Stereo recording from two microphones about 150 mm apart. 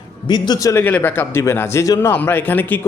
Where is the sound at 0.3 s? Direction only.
25° left (ahead or behind).